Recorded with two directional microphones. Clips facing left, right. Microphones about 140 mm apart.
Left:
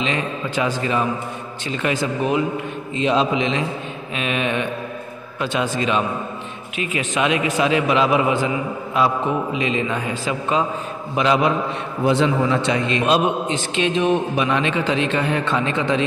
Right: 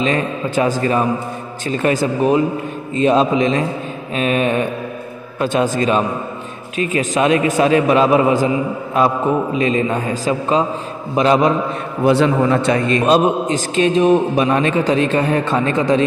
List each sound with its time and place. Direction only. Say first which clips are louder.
0.0 s a man's voice: right 5 dB; 45° right (ahead or behind)
12.0 s a man's voice: right 4 dB; 65° right (ahead or behind); by 16.0 s 40° right (ahead or behind)